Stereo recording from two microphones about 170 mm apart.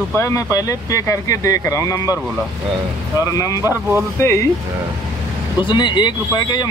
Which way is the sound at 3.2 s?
20° left (ahead or behind).